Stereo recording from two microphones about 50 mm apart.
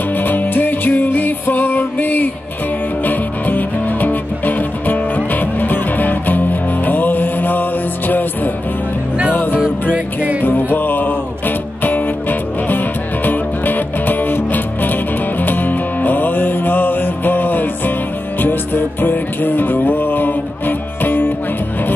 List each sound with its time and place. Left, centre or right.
0.1 s music: left
9.9 s music: right
10.4 s music: left